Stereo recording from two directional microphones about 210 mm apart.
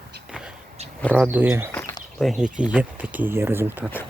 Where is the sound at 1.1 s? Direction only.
10° right (ahead or behind).